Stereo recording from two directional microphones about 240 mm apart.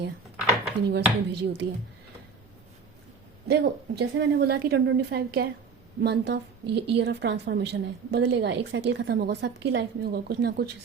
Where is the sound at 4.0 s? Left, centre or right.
Right.